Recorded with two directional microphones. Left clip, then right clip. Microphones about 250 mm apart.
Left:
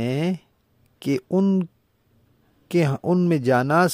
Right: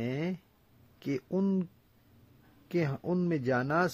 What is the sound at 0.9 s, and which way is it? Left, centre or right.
Speech, left.